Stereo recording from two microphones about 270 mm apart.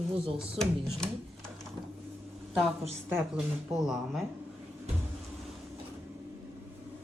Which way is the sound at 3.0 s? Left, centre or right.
Centre.